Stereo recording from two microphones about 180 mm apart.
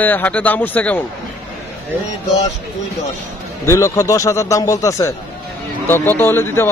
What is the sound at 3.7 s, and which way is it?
A man's voice, 15° left (ahead or behind).